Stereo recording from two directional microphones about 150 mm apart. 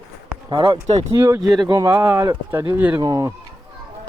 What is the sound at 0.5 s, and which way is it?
Speech, 35° right (ahead or behind).